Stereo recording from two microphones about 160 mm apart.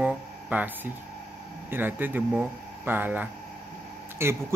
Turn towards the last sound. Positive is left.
turn(degrees=-15)  # may be behind; listen again after turning